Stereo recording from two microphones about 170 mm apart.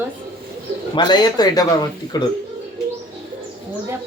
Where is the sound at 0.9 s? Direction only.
25° left (ahead or behind).